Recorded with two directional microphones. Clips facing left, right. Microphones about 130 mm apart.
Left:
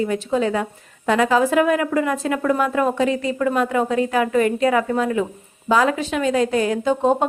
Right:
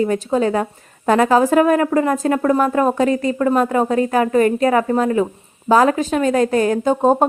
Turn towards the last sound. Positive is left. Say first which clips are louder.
# right 3 dB
turn(degrees=-45)  # may be behind; listen again after turning